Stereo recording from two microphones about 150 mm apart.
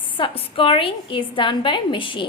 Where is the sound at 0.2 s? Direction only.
35° left (ahead or behind).